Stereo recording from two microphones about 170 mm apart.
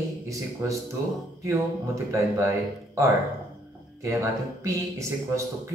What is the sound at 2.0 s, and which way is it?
A man's voice, 20° right (ahead or behind).